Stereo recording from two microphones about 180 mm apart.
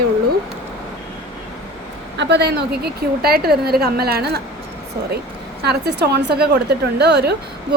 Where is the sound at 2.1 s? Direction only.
70° right (ahead or behind).